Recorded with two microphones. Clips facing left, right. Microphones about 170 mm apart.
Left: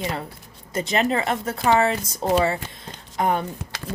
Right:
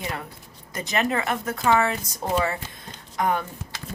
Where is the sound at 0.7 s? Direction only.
25° left (ahead or behind).